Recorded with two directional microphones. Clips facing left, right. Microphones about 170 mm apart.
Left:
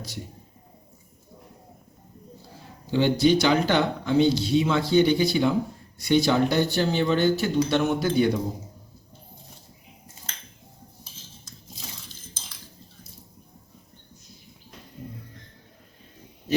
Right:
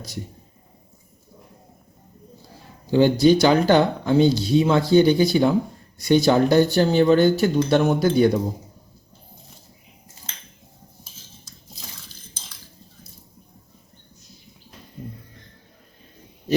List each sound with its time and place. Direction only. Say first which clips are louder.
2.9 s speech: right 5 dB; 40° right (ahead or behind)